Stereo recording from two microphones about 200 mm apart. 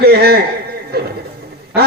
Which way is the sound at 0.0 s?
50° right (ahead or behind).